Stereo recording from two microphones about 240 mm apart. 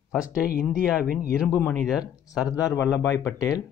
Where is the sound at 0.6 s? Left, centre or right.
Centre.